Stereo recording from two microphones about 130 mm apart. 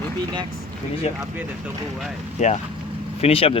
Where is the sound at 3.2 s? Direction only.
50° left (ahead or behind).